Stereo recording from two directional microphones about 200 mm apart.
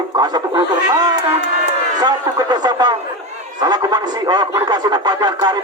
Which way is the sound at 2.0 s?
20° right (ahead or behind).